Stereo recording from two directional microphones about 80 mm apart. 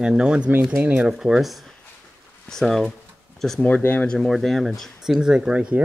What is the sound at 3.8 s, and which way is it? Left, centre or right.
Speech, left.